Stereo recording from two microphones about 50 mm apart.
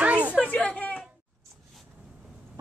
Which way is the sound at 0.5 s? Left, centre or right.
Left.